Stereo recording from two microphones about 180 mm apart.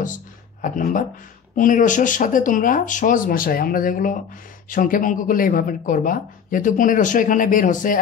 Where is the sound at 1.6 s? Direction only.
45° left (ahead or behind).